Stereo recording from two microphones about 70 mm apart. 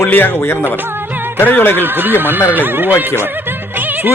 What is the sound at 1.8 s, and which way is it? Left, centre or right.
Speech, right.